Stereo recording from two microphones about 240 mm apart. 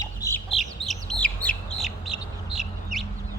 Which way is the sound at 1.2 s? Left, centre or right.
Centre.